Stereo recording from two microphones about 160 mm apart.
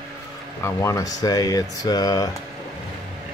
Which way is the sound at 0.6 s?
20° left (ahead or behind).